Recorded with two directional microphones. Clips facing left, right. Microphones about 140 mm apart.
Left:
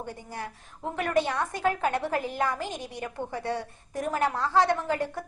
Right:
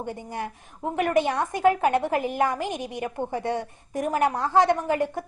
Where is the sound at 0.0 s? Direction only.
20° right (ahead or behind).